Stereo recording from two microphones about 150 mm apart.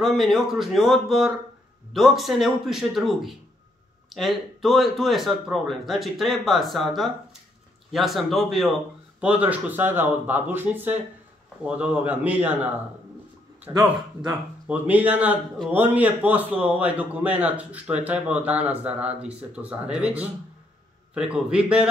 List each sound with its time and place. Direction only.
0.0 s a man's voice: centre (ahead or behind)
13.7 s a man's voice: 25° right (ahead or behind)
14.7 s a man's voice: 10° right (ahead or behind)